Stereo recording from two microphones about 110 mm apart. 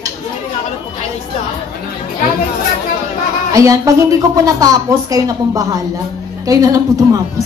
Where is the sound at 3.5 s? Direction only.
30° right (ahead or behind).